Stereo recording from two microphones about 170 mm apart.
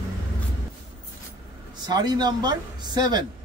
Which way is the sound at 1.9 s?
25° right (ahead or behind).